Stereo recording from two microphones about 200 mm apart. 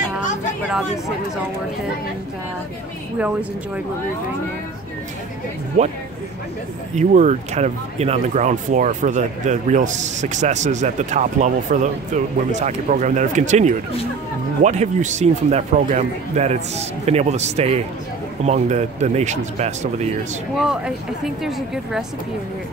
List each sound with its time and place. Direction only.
0.7 s speech: 5° right (ahead or behind)
3.2 s a woman's voice: 5° right (ahead or behind)
5.8 s speech: 40° right (ahead or behind)
7.0 s speech: 40° right (ahead or behind)
20.5 s speech: 5° right (ahead or behind)